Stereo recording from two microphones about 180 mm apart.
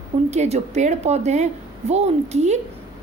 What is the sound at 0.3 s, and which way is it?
A woman's voice, 35° right (ahead or behind).